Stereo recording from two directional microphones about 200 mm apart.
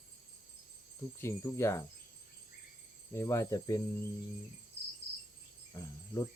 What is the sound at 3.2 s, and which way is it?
Cricket, 15° left (ahead or behind).